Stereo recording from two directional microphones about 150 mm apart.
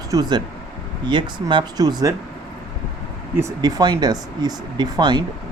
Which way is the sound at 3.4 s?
20° right (ahead or behind).